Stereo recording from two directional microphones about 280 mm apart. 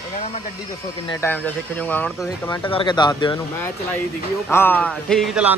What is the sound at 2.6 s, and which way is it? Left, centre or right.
A man's voice, centre.